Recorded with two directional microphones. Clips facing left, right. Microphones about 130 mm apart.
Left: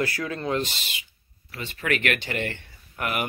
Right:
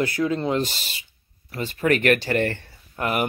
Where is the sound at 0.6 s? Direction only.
40° right (ahead or behind).